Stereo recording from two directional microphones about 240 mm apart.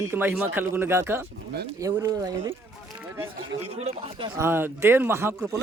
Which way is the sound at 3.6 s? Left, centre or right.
Right.